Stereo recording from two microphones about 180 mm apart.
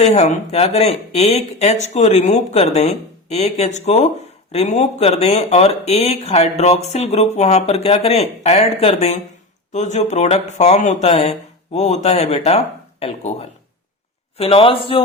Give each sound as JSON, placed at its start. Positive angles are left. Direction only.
{"t": 0.0, "sound": "speech", "side_deg": 40}
{"t": 14.3, "sound": "speech", "side_deg": 30}